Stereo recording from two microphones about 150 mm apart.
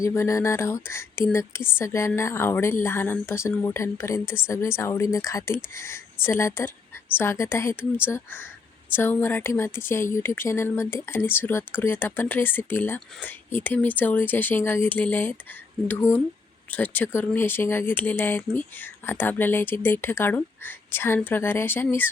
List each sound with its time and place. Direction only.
0.0 s a woman's voice: 20° left (ahead or behind)